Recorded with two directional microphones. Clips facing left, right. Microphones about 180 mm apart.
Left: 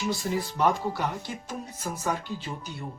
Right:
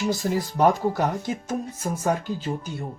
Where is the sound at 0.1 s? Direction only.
40° right (ahead or behind).